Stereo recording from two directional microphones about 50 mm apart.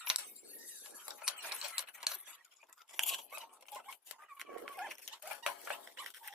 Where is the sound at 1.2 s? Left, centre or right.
Centre.